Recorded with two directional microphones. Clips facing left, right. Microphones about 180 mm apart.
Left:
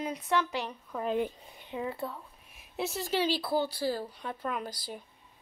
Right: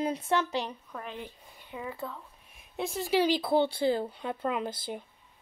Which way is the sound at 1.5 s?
20° left (ahead or behind).